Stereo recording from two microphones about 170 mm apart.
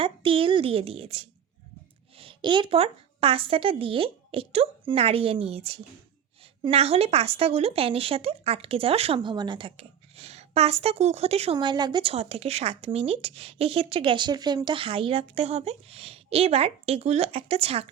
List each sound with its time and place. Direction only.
0.0 s speech: 30° right (ahead or behind)
11.5 s speech: 25° right (ahead or behind)